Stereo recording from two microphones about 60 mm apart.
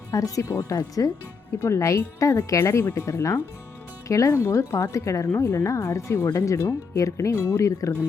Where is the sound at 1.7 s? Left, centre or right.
Left.